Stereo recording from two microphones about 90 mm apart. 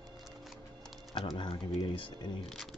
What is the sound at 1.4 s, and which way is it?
Speech, 70° left (ahead or behind).